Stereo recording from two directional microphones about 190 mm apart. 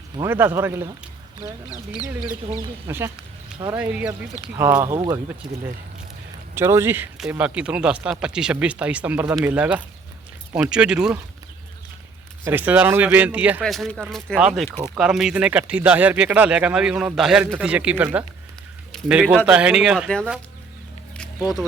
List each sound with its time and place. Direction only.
0.2 s speech: 10° right (ahead or behind)
1.7 s speech: 20° left (ahead or behind)
2.8 s speech: 15° right (ahead or behind)
6.5 s speech: 15° right (ahead or behind)
12.5 s speech: 10° right (ahead or behind)